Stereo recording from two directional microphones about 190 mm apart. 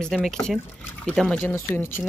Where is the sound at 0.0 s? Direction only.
Centre (ahead or behind).